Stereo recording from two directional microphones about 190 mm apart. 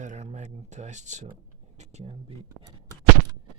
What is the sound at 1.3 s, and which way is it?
Speech, 35° right (ahead or behind).